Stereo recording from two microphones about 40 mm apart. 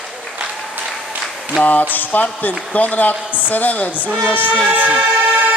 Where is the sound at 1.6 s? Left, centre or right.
Left.